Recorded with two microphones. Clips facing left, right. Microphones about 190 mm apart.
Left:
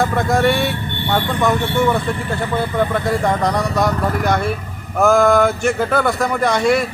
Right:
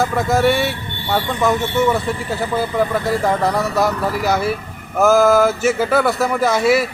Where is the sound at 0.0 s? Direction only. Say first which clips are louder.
Even; centre (ahead or behind).